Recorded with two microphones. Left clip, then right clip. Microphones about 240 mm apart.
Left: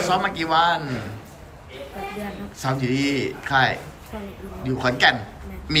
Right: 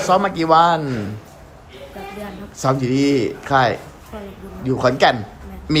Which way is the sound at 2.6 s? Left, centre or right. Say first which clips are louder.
Right 6 dB; right.